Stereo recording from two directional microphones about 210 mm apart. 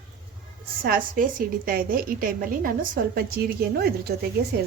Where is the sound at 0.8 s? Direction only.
45° right (ahead or behind).